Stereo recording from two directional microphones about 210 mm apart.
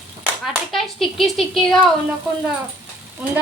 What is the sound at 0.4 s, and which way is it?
Speech, centre (ahead or behind).